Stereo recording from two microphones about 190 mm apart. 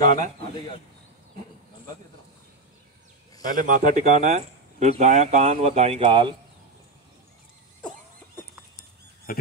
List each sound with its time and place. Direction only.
0.0 s bird: 40° right (ahead or behind)
3.4 s speech: 45° right (ahead or behind); by 6.3 s 25° right (ahead or behind)
9.3 s speech: 45° left (ahead or behind)